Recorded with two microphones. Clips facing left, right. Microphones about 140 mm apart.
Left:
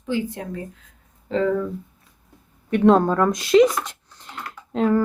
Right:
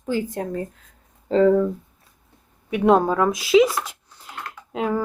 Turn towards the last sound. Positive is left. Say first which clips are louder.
# left 4 dB
turn(degrees=-10)  # may be behind; listen again after turning